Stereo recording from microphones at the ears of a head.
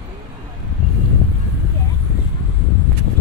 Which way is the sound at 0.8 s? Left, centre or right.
Left.